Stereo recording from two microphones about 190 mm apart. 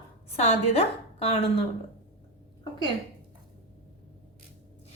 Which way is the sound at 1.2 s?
30° left (ahead or behind).